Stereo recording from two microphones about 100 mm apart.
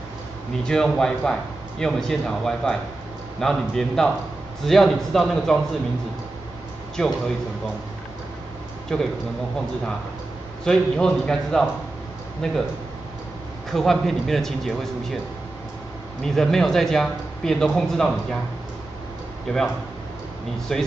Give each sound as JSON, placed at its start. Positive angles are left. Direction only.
{"t": 0.7, "sound": "a man's voice", "side_deg": 5}
{"t": 8.9, "sound": "a man's voice", "side_deg": 5}
{"t": 10.6, "sound": "a man's voice", "side_deg": 5}
{"t": 13.7, "sound": "a man's voice", "side_deg": 5}
{"t": 16.2, "sound": "a man's voice", "side_deg": 5}
{"t": 20.7, "sound": "a man's voice", "side_deg": 5}